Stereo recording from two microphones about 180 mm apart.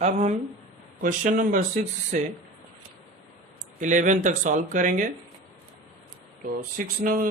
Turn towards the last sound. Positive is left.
turn(degrees=-50)  # may be behind; listen again after turning